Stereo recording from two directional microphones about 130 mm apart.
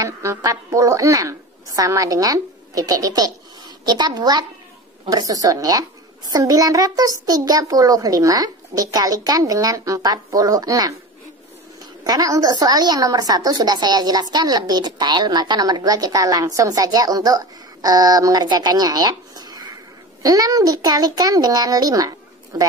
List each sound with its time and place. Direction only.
0.0 s a woman's voice: 25° right (ahead or behind)
12.0 s a woman's voice: 30° right (ahead or behind)